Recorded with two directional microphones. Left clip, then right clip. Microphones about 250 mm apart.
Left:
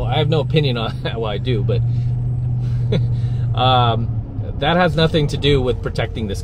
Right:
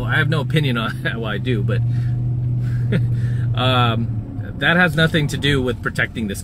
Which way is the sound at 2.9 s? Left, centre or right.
Left.